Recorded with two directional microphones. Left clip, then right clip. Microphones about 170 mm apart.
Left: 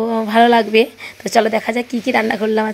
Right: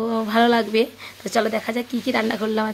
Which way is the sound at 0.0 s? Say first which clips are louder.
Left 6 dB; 10° left (ahead or behind).